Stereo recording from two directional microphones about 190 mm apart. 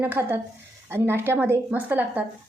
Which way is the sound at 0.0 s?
10° right (ahead or behind).